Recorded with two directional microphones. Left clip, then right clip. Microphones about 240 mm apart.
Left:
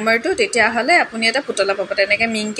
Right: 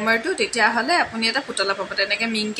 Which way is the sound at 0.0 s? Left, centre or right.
Centre.